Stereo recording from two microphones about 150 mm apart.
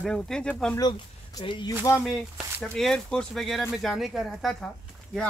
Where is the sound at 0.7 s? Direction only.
25° left (ahead or behind).